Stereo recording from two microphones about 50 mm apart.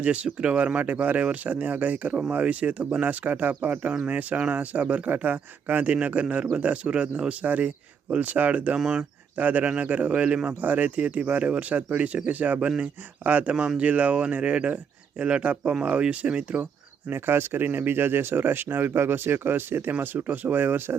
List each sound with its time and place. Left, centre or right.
0.0 s speech: right
8.8 s speech: centre
9.4 s speech: right
12.5 s speech: right
13.2 s speech: right
13.5 s speech: right
17.1 s speech: right
19.9 s speech: right